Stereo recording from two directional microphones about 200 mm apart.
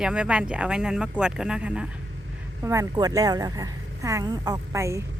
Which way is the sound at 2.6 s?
15° right (ahead or behind).